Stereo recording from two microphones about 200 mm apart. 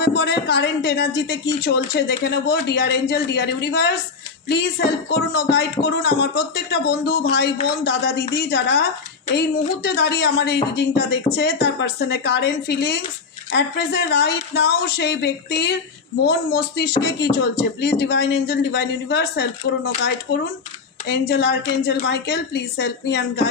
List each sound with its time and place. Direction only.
0.0 s speech: 55° left (ahead or behind)
21.1 s speech: 55° left (ahead or behind)